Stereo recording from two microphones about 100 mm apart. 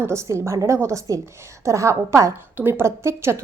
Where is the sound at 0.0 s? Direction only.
30° right (ahead or behind).